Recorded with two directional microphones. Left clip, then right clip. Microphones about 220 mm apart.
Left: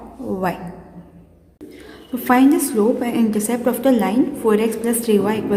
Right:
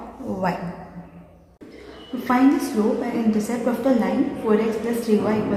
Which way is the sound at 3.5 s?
55° left (ahead or behind).